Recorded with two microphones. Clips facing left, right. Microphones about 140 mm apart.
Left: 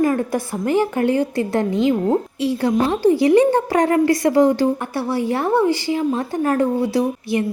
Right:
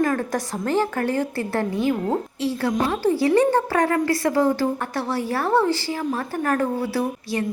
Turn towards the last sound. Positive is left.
turn(degrees=15)  # may be behind; listen again after turning